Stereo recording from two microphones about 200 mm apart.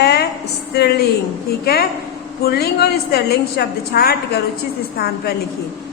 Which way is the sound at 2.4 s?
50° left (ahead or behind).